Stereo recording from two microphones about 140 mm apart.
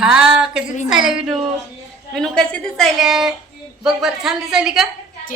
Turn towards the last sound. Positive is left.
turn(degrees=-5)  # may be behind; listen again after turning